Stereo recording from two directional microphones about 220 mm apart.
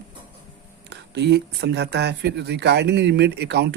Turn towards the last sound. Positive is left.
turn(degrees=-50)  # may be behind; listen again after turning